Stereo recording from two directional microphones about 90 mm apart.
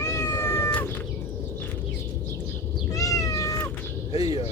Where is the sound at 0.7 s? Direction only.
20° left (ahead or behind).